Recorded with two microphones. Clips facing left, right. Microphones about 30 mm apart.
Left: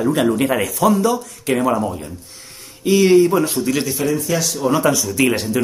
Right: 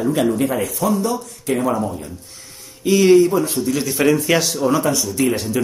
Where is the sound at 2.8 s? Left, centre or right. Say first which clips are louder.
Even; centre.